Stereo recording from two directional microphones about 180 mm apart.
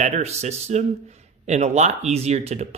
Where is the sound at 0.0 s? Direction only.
35° right (ahead or behind).